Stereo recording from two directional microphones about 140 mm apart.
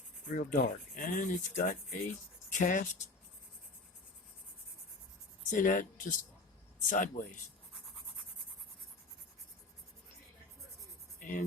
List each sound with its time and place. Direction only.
0.3 s speech: 70° left (ahead or behind)
5.5 s speech: 70° left (ahead or behind)
11.2 s speech: 70° left (ahead or behind)